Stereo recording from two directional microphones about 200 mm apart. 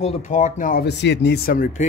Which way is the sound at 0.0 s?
40° left (ahead or behind).